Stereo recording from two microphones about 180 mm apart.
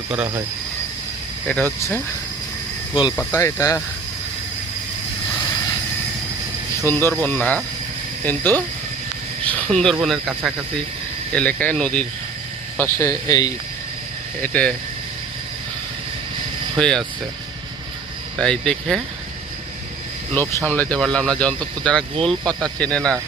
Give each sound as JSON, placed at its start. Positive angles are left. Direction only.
{"t": 1.5, "sound": "speech", "side_deg": 10}
{"t": 2.9, "sound": "speech", "side_deg": 25}
{"t": 7.1, "sound": "speech", "side_deg": 10}
{"t": 14.4, "sound": "speech", "side_deg": 10}
{"t": 16.7, "sound": "speech", "side_deg": 0}
{"t": 18.3, "sound": "speech", "side_deg": 5}
{"t": 20.3, "sound": "speech", "side_deg": 10}